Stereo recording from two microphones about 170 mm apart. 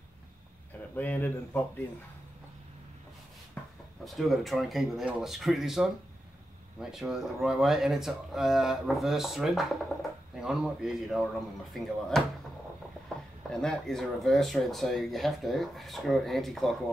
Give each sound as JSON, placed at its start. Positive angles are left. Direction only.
{"t": 0.9, "sound": "speech", "side_deg": 10}
{"t": 4.0, "sound": "speech", "side_deg": 0}
{"t": 13.5, "sound": "speech", "side_deg": 5}